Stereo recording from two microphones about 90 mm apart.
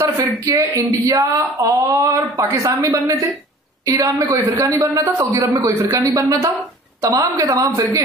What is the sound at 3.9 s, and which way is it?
A man's voice, 35° right (ahead or behind).